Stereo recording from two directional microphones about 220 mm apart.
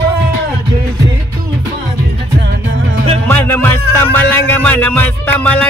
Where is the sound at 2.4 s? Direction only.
55° right (ahead or behind).